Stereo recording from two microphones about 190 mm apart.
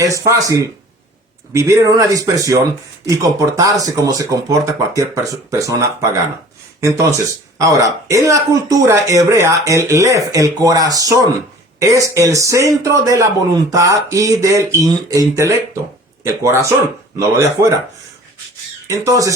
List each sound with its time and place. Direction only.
0.0 s speech: 15° right (ahead or behind)
18.9 s speech: 15° right (ahead or behind)